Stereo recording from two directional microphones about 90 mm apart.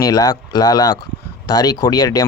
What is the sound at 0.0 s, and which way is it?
A man's voice, 40° left (ahead or behind).